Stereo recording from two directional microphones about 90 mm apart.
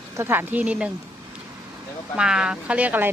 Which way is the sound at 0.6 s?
15° right (ahead or behind).